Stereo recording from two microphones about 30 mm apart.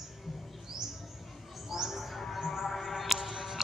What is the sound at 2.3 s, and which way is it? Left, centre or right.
Music, centre.